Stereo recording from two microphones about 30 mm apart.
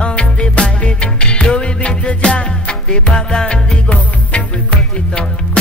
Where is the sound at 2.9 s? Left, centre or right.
Left.